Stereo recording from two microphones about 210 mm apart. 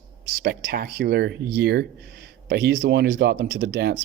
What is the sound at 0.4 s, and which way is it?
Speech, 45° right (ahead or behind).